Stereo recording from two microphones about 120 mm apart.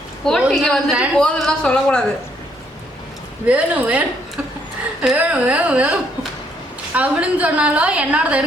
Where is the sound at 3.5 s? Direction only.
10° right (ahead or behind).